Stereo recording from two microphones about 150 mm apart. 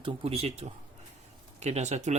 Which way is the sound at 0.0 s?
40° right (ahead or behind).